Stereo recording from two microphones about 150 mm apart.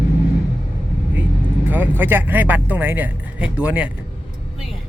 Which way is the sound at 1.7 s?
15° right (ahead or behind).